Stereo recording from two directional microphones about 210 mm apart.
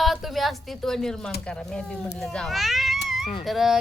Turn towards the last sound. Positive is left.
turn(degrees=0)  # may be behind; listen again after turning